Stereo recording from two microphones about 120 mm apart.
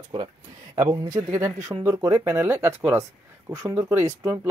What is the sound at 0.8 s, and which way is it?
Speech, 25° right (ahead or behind).